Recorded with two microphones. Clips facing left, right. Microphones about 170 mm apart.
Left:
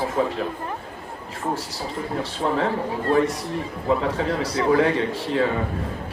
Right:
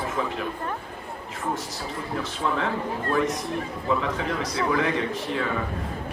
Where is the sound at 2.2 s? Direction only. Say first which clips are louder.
Left 4 dB; 35° left (ahead or behind).